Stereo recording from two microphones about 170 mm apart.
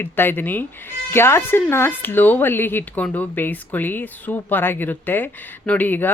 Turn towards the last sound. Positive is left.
turn(degrees=10)  # may be behind; listen again after turning